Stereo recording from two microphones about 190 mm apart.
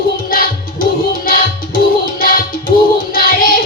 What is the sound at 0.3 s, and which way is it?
Music, 50° left (ahead or behind).